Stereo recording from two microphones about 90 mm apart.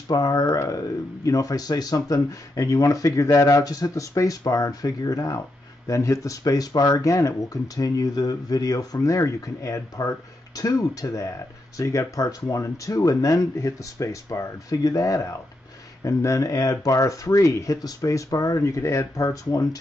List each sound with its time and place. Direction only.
0.1 s speech: 45° left (ahead or behind)